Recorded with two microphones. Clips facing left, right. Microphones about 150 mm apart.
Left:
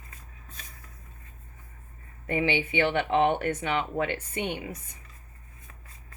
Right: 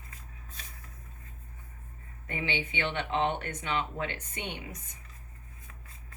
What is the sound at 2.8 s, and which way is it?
Speech, 60° left (ahead or behind).